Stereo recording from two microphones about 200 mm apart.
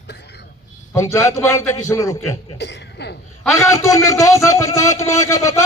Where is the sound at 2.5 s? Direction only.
60° left (ahead or behind).